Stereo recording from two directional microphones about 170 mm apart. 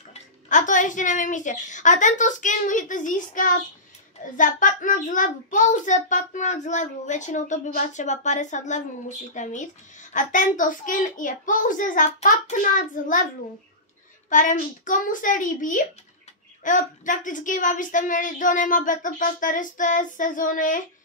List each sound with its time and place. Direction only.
0.1 s a child's voice: 45° left (ahead or behind)
14.3 s a child's voice: 50° left (ahead or behind)